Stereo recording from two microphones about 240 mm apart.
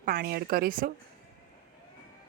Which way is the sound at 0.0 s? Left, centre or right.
Right.